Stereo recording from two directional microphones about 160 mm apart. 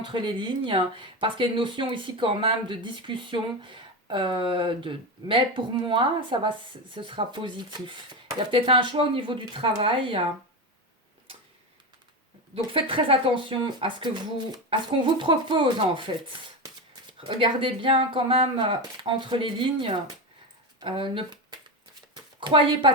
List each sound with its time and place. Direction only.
0.0 s speech: 30° right (ahead or behind)
12.5 s speech: 35° right (ahead or behind)
15.2 s speech: 30° right (ahead or behind)
22.1 s a sound: 30° right (ahead or behind)